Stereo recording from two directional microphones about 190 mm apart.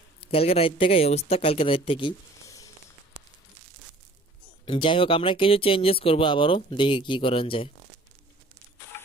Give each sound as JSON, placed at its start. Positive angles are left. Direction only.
{"t": 0.2, "sound": "speech", "side_deg": 30}
{"t": 4.6, "sound": "speech", "side_deg": 25}